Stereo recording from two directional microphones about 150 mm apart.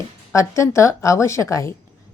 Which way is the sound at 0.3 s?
20° left (ahead or behind).